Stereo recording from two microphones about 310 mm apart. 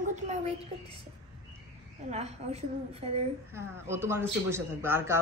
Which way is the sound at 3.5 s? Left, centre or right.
Centre.